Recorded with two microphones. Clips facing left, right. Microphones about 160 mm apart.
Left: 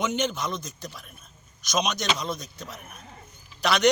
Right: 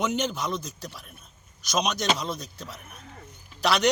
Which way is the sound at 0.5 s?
35° right (ahead or behind).